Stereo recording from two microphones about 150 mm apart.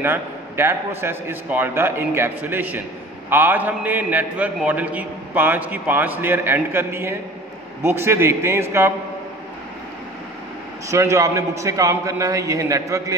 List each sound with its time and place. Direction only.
0.0 s a man's voice: 15° right (ahead or behind)
10.9 s a man's voice: 20° right (ahead or behind)